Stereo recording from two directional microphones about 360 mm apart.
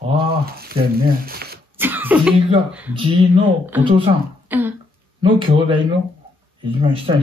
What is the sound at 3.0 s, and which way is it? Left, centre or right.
Speech, centre.